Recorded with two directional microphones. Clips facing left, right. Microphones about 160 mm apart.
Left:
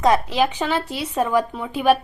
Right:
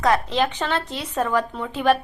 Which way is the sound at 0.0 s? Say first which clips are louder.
Left 2 dB; 15° left (ahead or behind).